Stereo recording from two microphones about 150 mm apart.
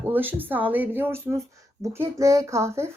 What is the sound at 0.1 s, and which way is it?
Speech, 10° right (ahead or behind).